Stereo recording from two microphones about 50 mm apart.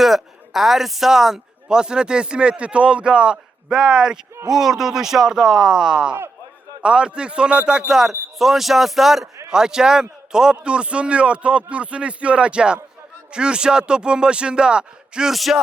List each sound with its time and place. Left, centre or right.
0.0 s a man's voice: centre; by 7.9 s right
7.9 s a man's voice: centre
15.3 s speech: centre